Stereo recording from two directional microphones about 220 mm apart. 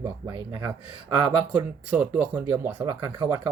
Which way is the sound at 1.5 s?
10° right (ahead or behind).